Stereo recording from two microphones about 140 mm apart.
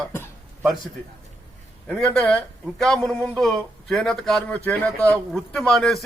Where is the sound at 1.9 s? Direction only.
5° left (ahead or behind).